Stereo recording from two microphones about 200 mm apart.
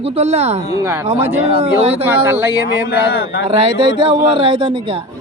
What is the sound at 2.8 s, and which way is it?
Speech, 55° left (ahead or behind).